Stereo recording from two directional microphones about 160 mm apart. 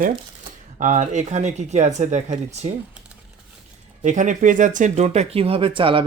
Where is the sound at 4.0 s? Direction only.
50° right (ahead or behind).